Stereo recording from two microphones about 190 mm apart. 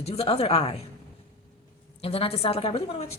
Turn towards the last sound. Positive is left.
turn(degrees=30)  # may be behind; listen again after turning